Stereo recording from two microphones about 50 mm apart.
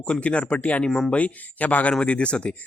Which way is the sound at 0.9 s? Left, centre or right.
Centre.